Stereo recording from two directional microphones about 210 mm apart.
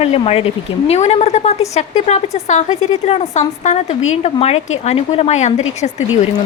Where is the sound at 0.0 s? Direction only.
30° left (ahead or behind).